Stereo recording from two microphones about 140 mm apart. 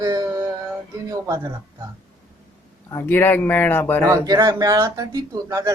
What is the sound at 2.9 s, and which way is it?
Speech, 15° left (ahead or behind).